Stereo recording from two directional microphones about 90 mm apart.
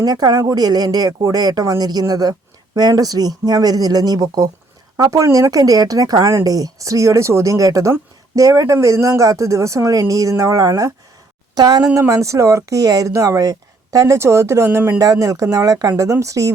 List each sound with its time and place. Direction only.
0.0 s speech: 50° right (ahead or behind)
11.9 s speech: 35° right (ahead or behind)
14.9 s speech: 40° right (ahead or behind)